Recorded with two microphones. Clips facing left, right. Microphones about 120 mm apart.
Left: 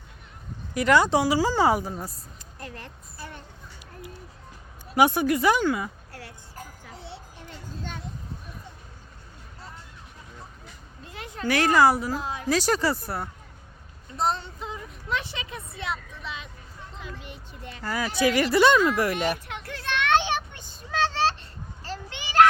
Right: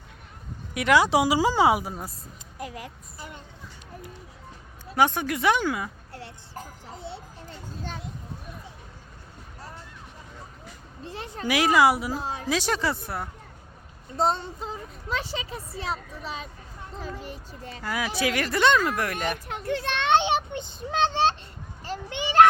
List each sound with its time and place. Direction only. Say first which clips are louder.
0.7 s speech: even; centre (ahead or behind)
1.2 s a woman's voice: right 1 dB; 15° right (ahead or behind)
4.9 s speech: left 3 dB; 10° left (ahead or behind)
6.1 s a sound: right 2 dB; 25° right (ahead or behind)
11.0 s a sound: right 2 dB; 30° right (ahead or behind)
11.4 s speech: even; 5° right (ahead or behind)
12.2 s a woman's voice: even; 35° right (ahead or behind)
12.5 s speech: left 3 dB; centre (ahead or behind)
14.4 s speech: right 2 dB; 35° right (ahead or behind)
17.8 s speech: left 3 dB; centre (ahead or behind)
19.6 s child singing: right 2 dB; 20° right (ahead or behind)
21.8 s children playing: right 6 dB; 20° right (ahead or behind)